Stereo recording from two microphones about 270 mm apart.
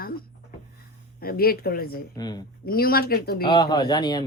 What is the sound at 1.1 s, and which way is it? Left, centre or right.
Speech, left.